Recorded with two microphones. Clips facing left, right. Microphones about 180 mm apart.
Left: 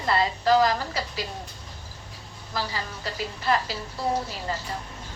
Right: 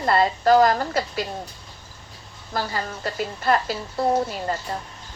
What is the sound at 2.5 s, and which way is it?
A woman's voice, 55° right (ahead or behind).